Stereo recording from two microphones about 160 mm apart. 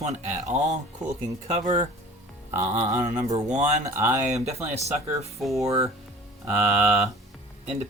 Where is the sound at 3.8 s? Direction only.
20° right (ahead or behind).